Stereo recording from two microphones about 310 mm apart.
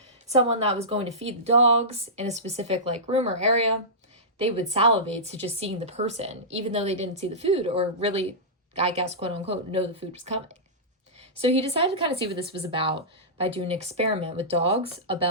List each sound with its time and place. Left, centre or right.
0.3 s a woman's voice: centre